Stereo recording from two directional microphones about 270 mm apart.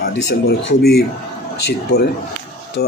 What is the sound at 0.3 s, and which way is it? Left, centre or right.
Speech, left.